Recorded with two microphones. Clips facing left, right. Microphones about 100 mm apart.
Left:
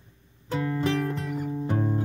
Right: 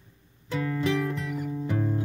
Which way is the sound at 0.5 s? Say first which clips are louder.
Left 1 dB; 35° left (ahead or behind).